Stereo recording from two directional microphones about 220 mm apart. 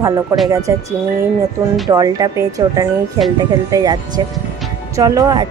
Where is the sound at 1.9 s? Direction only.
15° right (ahead or behind).